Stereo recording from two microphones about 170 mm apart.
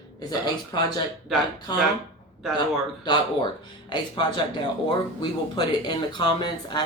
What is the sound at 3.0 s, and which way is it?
Speech, 25° left (ahead or behind).